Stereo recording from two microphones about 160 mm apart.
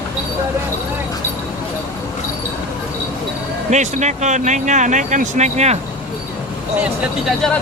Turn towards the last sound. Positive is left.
turn(degrees=5)  # may be behind; listen again after turning